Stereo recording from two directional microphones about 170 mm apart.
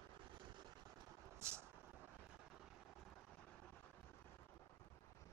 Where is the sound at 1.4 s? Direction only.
15° right (ahead or behind).